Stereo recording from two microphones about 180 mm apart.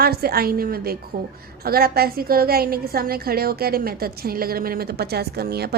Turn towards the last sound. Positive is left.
turn(degrees=-60)  # may be behind; listen again after turning